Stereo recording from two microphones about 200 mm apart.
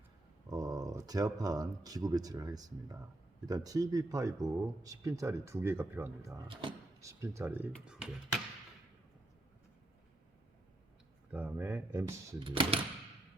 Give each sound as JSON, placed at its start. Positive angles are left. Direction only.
{"t": 0.4, "sound": "speech", "side_deg": -20}
{"t": 11.3, "sound": "speech", "side_deg": -10}
{"t": 12.4, "sound": "speech", "side_deg": -25}